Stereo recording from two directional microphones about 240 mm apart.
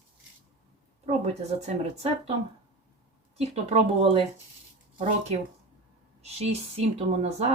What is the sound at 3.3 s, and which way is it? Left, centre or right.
Speech, right.